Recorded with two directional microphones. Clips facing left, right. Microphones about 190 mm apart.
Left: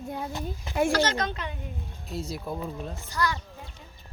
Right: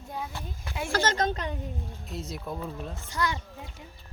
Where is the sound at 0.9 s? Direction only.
45° right (ahead or behind).